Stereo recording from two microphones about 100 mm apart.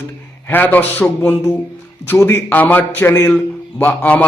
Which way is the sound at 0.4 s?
20° left (ahead or behind).